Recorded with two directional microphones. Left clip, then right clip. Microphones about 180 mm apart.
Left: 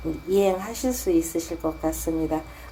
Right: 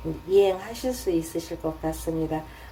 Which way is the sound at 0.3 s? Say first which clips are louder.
Right 1 dB; 25° left (ahead or behind).